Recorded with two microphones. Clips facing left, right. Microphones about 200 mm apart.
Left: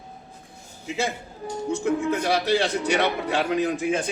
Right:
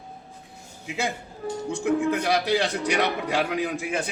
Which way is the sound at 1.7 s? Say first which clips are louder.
Even; 15° right (ahead or behind).